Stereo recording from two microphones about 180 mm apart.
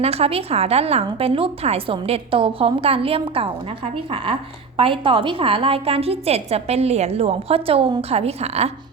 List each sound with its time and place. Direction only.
0.0 s a woman's voice: 35° right (ahead or behind)